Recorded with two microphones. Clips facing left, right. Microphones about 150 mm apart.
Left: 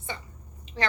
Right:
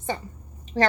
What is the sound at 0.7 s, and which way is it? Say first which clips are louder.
Speech: right 8 dB; 35° right (ahead or behind).